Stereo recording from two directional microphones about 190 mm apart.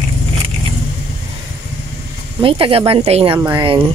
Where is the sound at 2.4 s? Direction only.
30° right (ahead or behind).